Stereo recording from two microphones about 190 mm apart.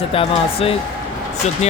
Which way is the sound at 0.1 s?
30° left (ahead or behind).